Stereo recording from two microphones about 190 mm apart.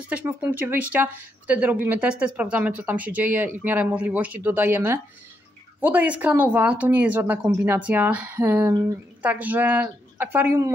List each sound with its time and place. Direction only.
0.1 s speech: 10° right (ahead or behind)